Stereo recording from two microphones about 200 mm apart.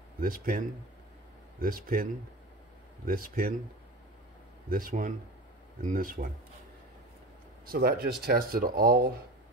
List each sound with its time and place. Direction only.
0.2 s speech: 45° right (ahead or behind)
3.1 s speech: 45° right (ahead or behind)
4.6 s speech: 45° right (ahead or behind)
7.6 s speech: 50° right (ahead or behind)